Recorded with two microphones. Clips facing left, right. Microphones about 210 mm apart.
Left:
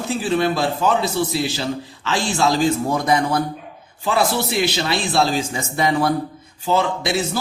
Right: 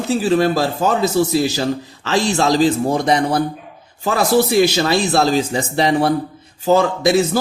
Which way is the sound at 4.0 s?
45° right (ahead or behind).